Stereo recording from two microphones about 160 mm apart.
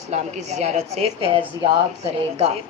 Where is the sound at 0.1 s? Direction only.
45° right (ahead or behind).